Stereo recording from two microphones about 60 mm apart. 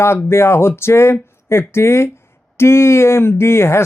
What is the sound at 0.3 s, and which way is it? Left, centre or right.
Speech, left.